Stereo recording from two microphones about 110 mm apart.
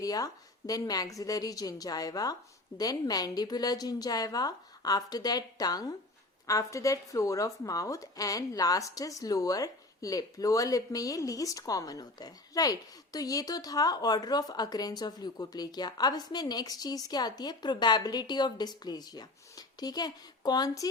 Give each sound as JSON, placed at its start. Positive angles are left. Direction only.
{"t": 0.0, "sound": "speech", "side_deg": 35}